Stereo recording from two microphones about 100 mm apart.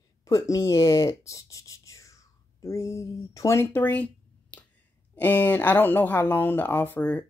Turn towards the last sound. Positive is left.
turn(degrees=15)  # may be behind; listen again after turning